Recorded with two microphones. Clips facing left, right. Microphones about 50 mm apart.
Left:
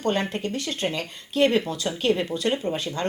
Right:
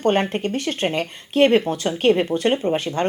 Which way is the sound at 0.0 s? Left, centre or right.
Right.